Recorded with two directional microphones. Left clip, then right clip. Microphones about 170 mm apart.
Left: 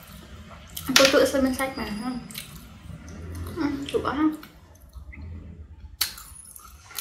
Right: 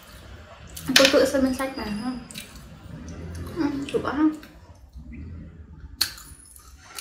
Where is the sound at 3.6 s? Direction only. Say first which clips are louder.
Even; centre (ahead or behind).